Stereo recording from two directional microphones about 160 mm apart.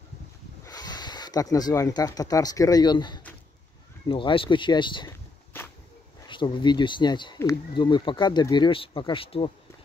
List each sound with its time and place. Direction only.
0.7 s speech: 25° left (ahead or behind)
6.2 s speech: 30° left (ahead or behind)